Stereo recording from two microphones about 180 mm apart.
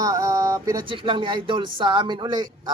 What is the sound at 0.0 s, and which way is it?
Speech, 20° right (ahead or behind).